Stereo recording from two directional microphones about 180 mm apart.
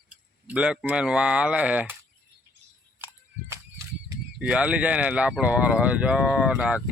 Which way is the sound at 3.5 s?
15° right (ahead or behind).